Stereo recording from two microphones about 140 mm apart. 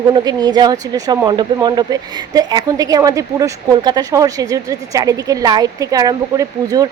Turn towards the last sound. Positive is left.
turn(degrees=-25)  # may be behind; listen again after turning